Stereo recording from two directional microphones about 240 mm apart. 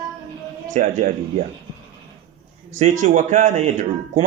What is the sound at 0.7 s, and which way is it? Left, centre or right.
Speech, right.